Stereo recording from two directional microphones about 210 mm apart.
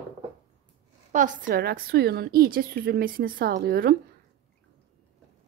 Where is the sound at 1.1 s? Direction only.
35° right (ahead or behind).